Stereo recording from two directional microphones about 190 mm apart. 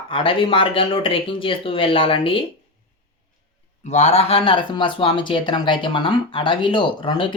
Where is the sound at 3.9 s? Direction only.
35° left (ahead or behind).